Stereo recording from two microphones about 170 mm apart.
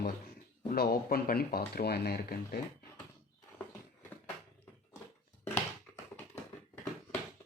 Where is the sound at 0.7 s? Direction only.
65° left (ahead or behind).